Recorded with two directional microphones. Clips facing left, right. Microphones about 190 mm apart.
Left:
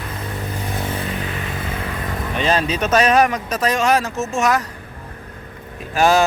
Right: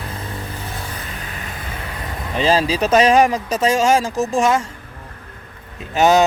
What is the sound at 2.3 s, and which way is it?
Speech, 30° right (ahead or behind).